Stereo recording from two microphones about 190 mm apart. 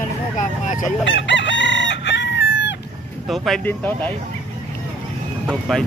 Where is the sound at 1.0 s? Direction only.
70° left (ahead or behind).